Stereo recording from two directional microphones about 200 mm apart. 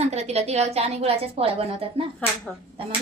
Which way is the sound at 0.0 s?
30° right (ahead or behind).